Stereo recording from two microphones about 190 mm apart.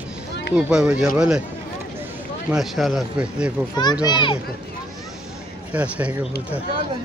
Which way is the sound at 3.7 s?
20° left (ahead or behind).